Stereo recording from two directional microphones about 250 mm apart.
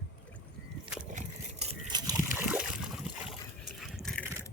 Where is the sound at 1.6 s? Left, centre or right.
Right.